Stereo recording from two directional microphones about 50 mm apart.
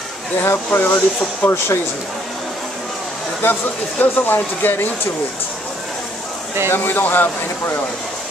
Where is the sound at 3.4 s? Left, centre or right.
Left.